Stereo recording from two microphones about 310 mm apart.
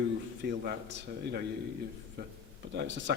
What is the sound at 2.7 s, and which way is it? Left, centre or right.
Speech, right.